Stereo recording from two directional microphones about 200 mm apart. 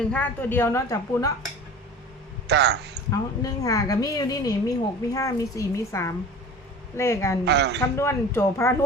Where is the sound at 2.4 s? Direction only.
55° right (ahead or behind).